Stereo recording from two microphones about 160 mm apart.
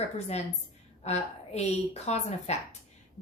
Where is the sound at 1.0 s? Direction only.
45° left (ahead or behind).